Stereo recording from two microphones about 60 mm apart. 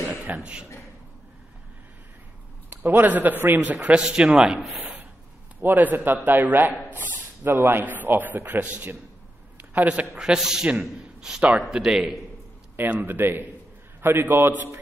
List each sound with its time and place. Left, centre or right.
0.1 s speech: right
2.7 s speech: right
4.0 s a man's voice: centre
5.6 s a man's voice: right
6.9 s a sound: right
7.8 s a man's voice: right
9.6 s a sound: right
10.1 s a man's voice: centre
13.0 s a man's voice: right